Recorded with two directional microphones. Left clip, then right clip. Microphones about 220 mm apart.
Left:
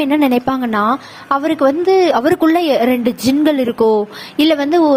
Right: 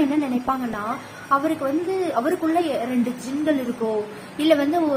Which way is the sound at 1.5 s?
45° left (ahead or behind).